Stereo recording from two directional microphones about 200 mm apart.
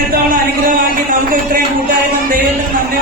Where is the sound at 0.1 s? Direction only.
45° right (ahead or behind).